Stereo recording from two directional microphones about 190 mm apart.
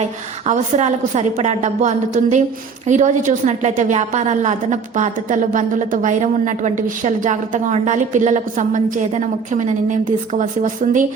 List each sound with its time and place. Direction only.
0.4 s a woman's voice: 40° right (ahead or behind)